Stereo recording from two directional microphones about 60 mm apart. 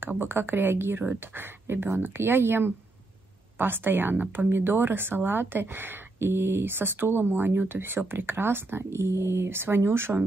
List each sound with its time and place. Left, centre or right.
0.2 s speech: right